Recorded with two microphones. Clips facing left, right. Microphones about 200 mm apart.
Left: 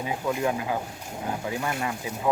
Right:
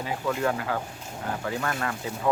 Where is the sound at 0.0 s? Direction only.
15° left (ahead or behind).